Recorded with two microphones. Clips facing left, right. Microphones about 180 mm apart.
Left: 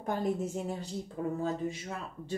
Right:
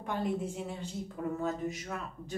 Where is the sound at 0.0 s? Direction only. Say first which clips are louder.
Left 2 dB; 40° left (ahead or behind).